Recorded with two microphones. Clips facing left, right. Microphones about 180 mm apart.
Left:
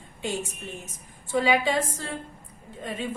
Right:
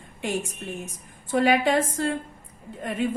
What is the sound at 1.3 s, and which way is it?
Speech, 60° right (ahead or behind).